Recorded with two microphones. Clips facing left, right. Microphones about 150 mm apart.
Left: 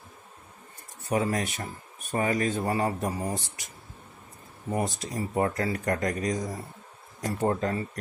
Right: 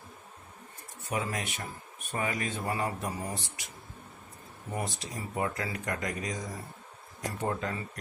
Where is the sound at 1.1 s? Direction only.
40° left (ahead or behind).